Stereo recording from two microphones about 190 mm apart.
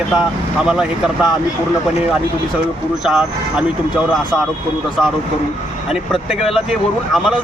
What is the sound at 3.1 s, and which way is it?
Speech, 5° right (ahead or behind).